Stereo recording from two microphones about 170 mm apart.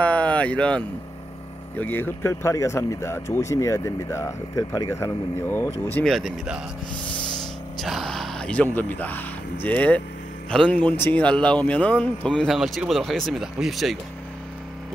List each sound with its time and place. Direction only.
0.0 s a sound: 5° left (ahead or behind)
1.8 s speech: 10° left (ahead or behind)
7.8 s a man's voice: centre (ahead or behind)